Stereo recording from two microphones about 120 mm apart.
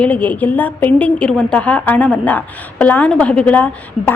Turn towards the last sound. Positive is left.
turn(degrees=10)  # may be behind; listen again after turning